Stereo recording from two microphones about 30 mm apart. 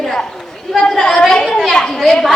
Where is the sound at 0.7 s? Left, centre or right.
Centre.